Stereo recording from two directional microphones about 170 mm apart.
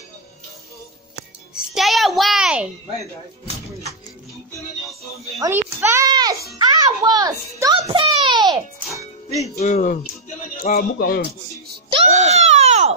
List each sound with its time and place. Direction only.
1.5 s music: centre (ahead or behind)
5.4 s a child's voice: 15° right (ahead or behind)
7.8 s a sound: 30° right (ahead or behind)
9.6 s speech: 50° left (ahead or behind)
11.9 s baby cry: 40° right (ahead or behind)